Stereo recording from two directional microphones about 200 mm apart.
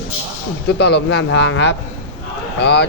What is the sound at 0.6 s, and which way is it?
A man's voice, 55° left (ahead or behind).